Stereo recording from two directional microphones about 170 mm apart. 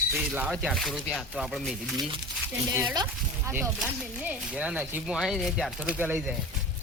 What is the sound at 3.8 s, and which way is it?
Speech, 5° right (ahead or behind).